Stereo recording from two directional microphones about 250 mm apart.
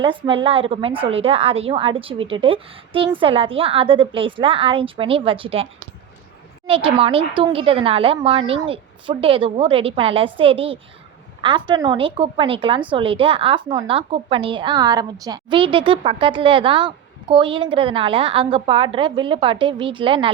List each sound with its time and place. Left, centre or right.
0.0 s a woman's voice: centre
6.7 s a woman's voice: right